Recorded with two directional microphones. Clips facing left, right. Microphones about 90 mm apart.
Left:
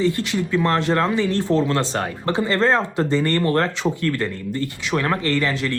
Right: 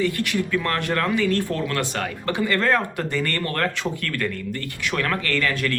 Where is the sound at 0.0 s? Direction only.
20° left (ahead or behind).